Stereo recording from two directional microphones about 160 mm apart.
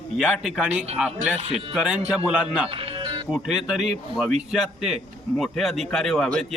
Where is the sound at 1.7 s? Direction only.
5° right (ahead or behind).